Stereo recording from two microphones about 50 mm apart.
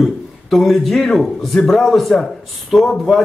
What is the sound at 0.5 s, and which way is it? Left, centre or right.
Speech, centre.